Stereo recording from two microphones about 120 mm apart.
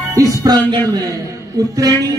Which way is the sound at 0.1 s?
30° right (ahead or behind).